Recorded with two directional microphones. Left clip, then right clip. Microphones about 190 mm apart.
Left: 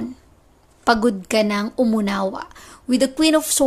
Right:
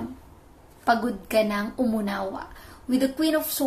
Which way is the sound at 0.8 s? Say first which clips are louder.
Left 6 dB; 50° left (ahead or behind).